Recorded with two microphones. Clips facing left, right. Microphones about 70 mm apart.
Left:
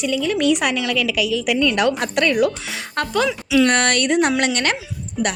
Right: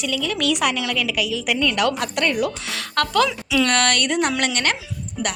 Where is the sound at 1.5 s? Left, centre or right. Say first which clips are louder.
Left 1 dB; left.